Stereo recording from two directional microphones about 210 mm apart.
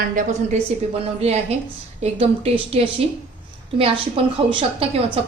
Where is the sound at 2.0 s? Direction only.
30° right (ahead or behind).